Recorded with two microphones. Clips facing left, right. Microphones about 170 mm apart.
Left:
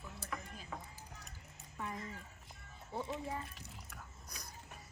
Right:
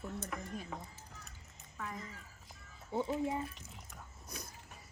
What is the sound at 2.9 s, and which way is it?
Speech, 20° right (ahead or behind).